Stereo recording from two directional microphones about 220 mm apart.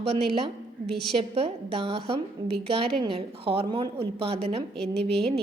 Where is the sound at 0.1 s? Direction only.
25° right (ahead or behind).